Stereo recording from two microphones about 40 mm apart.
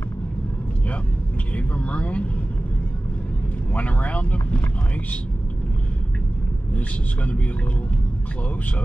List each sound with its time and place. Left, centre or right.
1.6 s speech: left
3.7 s speech: left